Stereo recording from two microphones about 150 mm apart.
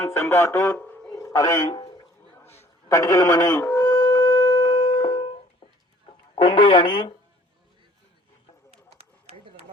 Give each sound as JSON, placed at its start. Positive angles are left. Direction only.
{"t": 0.0, "sound": "speech", "side_deg": 15}
{"t": 1.1, "sound": "a man's voice", "side_deg": 20}
{"t": 2.4, "sound": "a sound", "side_deg": 15}
{"t": 6.1, "sound": "speech", "side_deg": 30}